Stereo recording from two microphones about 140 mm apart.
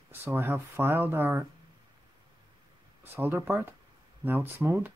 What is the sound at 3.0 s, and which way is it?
Speech, 15° right (ahead or behind).